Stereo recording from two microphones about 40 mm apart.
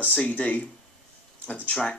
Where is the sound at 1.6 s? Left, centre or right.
Centre.